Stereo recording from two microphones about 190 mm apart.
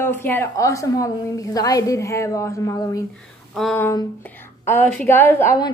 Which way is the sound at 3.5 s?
Centre (ahead or behind).